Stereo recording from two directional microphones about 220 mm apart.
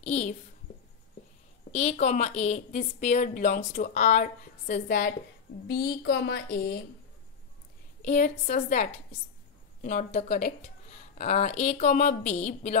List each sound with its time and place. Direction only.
0.0 s a child's voice: 30° left (ahead or behind)
1.7 s a woman's voice: 30° left (ahead or behind); by 6.8 s 45° left (ahead or behind)
8.0 s a woman's voice: 35° left (ahead or behind)